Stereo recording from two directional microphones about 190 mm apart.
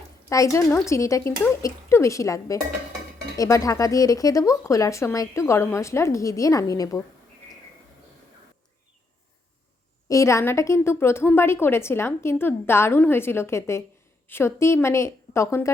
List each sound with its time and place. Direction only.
0.3 s a woman's voice: 15° left (ahead or behind)
10.1 s a woman's voice: 15° left (ahead or behind)